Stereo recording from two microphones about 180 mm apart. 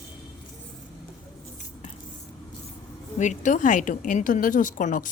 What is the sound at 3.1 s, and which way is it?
A woman's voice, 40° left (ahead or behind).